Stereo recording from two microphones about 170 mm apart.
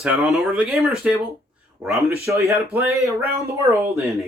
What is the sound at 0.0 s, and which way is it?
Speech, 5° right (ahead or behind).